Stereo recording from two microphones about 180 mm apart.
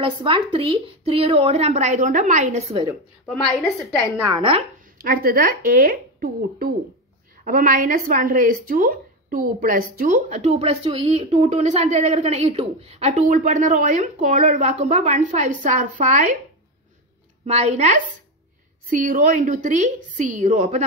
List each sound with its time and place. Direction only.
0.0 s speech: 30° right (ahead or behind)
4.4 s speech: 30° right (ahead or behind)
5.0 s speech: 55° right (ahead or behind)
17.5 s speech: 35° right (ahead or behind)